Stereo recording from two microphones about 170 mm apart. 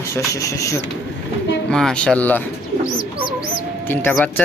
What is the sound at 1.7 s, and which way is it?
Speech, 5° left (ahead or behind).